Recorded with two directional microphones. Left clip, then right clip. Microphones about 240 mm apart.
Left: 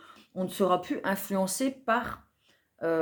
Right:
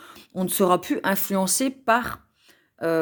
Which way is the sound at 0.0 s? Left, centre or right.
Right.